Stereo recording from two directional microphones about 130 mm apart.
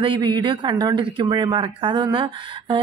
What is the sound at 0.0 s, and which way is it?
Speech, 35° right (ahead or behind).